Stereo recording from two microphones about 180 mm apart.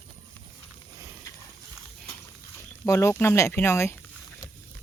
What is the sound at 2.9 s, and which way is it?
Speech, 15° left (ahead or behind).